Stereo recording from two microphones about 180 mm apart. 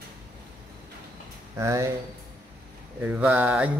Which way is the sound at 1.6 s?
15° right (ahead or behind).